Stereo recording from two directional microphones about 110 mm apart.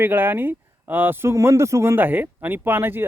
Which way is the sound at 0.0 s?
20° right (ahead or behind).